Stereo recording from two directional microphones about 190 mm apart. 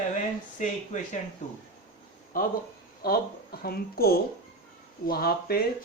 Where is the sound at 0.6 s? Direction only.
40° left (ahead or behind).